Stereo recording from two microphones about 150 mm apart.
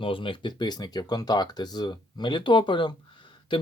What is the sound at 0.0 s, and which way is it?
Speech, 35° left (ahead or behind).